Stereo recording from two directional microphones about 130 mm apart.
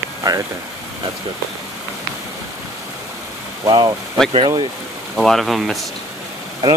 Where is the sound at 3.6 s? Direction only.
30° right (ahead or behind).